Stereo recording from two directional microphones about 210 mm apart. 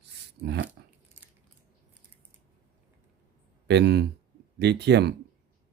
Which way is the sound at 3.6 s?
55° right (ahead or behind).